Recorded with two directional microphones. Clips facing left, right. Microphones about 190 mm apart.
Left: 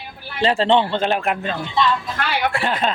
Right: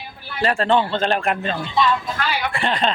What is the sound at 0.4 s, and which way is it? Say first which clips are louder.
Speech: left 2 dB; 25° left (ahead or behind).